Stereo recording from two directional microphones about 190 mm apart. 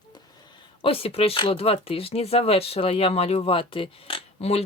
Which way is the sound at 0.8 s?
30° left (ahead or behind).